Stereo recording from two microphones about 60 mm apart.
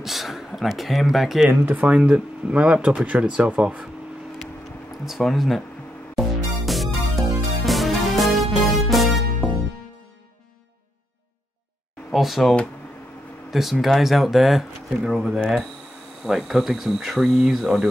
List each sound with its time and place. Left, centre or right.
0.0 s speech: centre
1.7 s speech: right
5.0 s speech: centre
6.1 s music: centre
12.1 s speech: centre